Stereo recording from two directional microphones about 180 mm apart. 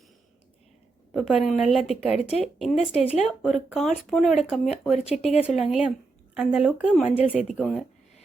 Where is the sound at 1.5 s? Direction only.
Centre (ahead or behind).